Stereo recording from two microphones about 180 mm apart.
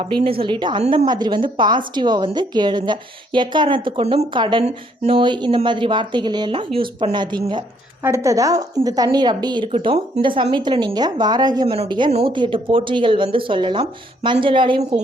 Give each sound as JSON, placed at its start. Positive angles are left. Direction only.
{"t": 0.0, "sound": "a woman's voice", "side_deg": -30}